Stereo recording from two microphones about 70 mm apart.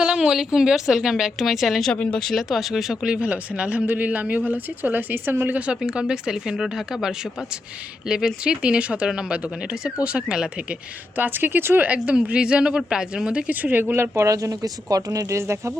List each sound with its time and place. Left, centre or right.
0.0 s a woman's voice: centre
1.9 s speech: centre
2.2 s a man's voice: centre; by 5.5 s right
5.8 s speech: centre
11.2 s a man's voice: right
13.9 s speech: right
14.3 s speech: right